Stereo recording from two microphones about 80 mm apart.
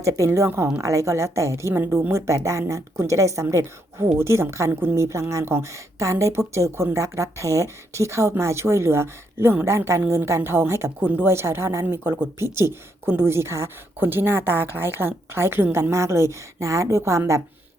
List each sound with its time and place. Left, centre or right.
0.0 s speech: right
11.0 s speech: right